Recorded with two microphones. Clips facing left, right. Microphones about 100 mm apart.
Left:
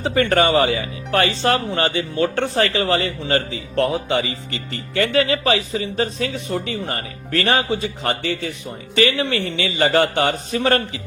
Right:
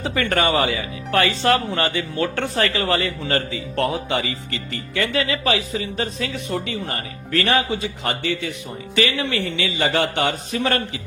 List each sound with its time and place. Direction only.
0.0 s speech: 35° left (ahead or behind)
4.7 s speech: 40° left (ahead or behind)